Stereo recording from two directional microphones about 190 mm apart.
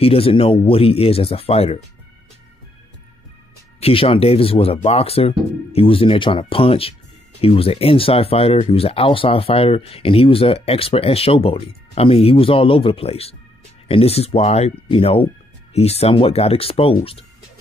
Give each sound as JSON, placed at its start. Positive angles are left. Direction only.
{"t": 0.0, "sound": "speech", "side_deg": 30}
{"t": 3.8, "sound": "speech", "side_deg": 30}